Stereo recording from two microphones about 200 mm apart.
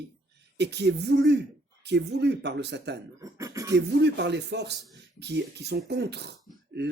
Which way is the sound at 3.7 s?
60° right (ahead or behind).